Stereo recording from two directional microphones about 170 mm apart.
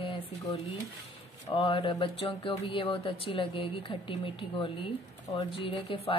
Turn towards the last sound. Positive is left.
turn(degrees=30)  # may be behind; listen again after turning